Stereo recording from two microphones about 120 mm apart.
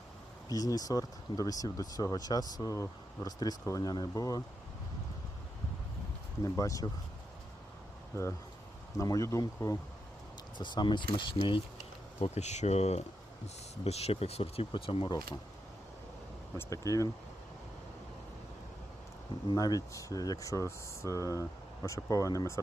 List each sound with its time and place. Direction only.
0.4 s speech: 30° left (ahead or behind)
6.4 s speech: 30° left (ahead or behind)
8.1 s speech: 25° left (ahead or behind)
10.6 s speech: 40° left (ahead or behind)
12.2 s speech: 70° left (ahead or behind); by 15.1 s 45° left (ahead or behind)
16.6 s speech: 25° left (ahead or behind)
19.5 s speech: 30° left (ahead or behind)